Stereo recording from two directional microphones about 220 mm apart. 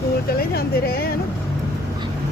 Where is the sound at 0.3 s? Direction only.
45° left (ahead or behind).